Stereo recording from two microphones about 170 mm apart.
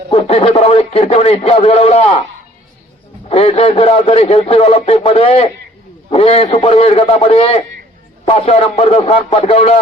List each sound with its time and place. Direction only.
0.1 s a man's voice: 35° left (ahead or behind)
3.2 s a man's voice: 35° left (ahead or behind)